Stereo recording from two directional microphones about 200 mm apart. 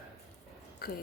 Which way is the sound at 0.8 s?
50° left (ahead or behind).